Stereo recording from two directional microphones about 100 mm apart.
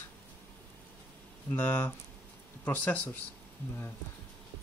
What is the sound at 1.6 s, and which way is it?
Speech, 20° left (ahead or behind).